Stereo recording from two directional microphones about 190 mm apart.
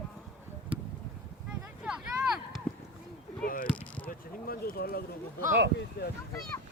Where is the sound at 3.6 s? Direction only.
5° left (ahead or behind).